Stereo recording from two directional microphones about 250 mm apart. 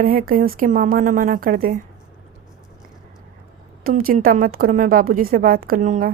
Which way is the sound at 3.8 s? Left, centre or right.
Right.